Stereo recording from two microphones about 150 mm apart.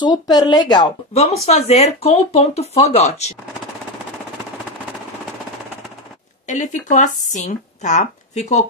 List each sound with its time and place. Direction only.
0.0 s speech: 25° left (ahead or behind)
1.1 s speech: 45° left (ahead or behind)
6.4 s speech: 55° left (ahead or behind)